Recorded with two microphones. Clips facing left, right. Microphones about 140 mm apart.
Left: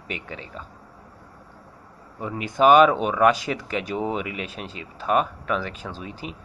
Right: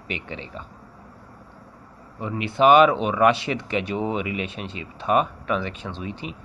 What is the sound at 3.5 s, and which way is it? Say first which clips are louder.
Speech: right 2 dB; centre (ahead or behind).